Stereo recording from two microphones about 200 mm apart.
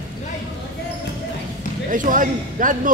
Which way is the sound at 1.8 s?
40° right (ahead or behind).